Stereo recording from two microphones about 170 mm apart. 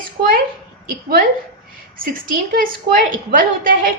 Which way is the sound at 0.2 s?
55° right (ahead or behind).